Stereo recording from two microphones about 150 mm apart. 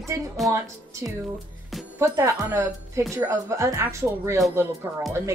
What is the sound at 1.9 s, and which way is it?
Speech, 20° right (ahead or behind).